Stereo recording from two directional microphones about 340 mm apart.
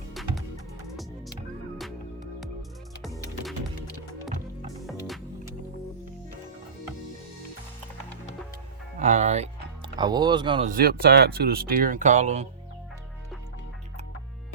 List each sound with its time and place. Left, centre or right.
0.1 s music: centre
4.9 s music: centre
9.0 s speech: centre